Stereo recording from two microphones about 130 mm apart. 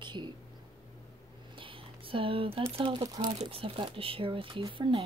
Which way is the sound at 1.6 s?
40° right (ahead or behind).